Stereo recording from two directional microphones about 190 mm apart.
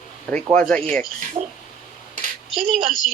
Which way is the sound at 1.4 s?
35° right (ahead or behind).